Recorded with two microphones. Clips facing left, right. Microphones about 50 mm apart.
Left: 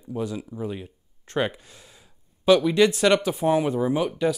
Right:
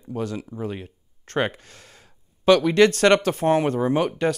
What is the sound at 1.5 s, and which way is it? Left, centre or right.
Gasp, right.